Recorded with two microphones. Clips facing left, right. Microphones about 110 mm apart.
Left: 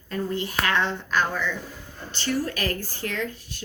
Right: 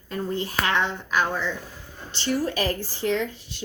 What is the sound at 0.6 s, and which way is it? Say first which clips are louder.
Speech: even; 20° right (ahead or behind).